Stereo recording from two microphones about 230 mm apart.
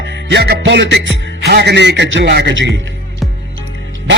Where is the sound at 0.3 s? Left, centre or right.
Right.